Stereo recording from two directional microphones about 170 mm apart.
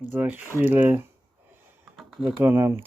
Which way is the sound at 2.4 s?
15° right (ahead or behind).